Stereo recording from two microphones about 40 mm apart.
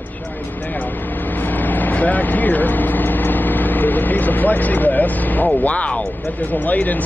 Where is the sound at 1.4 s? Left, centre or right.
Left.